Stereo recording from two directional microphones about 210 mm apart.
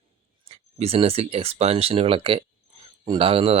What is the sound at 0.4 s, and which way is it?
Speech, 30° right (ahead or behind).